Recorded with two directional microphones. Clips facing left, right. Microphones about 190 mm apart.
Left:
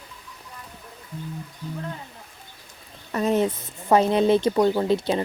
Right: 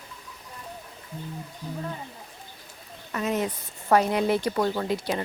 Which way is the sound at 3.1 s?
35° left (ahead or behind).